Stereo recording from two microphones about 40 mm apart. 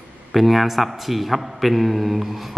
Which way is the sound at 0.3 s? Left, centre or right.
Centre.